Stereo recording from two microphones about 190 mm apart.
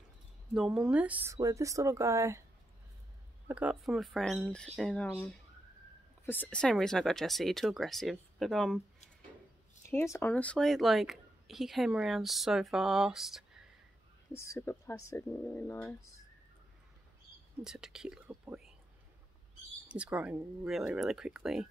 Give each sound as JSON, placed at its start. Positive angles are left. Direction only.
{"t": 0.6, "sound": "speech", "side_deg": -5}
{"t": 3.4, "sound": "speech", "side_deg": -5}
{"t": 9.8, "sound": "speech", "side_deg": 15}
{"t": 14.3, "sound": "speech", "side_deg": 15}
{"t": 17.6, "sound": "speech", "side_deg": -5}
{"t": 19.9, "sound": "speech", "side_deg": -5}